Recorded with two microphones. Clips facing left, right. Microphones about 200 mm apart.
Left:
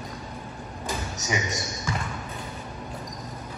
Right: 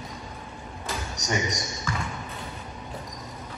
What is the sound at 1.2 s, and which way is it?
Speech, centre (ahead or behind).